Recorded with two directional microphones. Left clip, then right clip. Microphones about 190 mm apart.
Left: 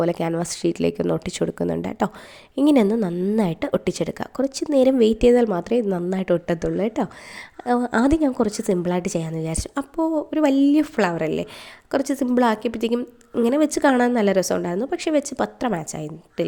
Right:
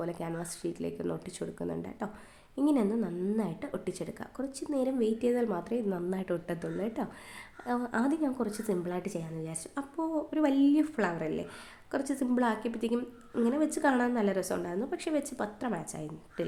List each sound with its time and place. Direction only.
0.0 s a woman's voice: 45° left (ahead or behind)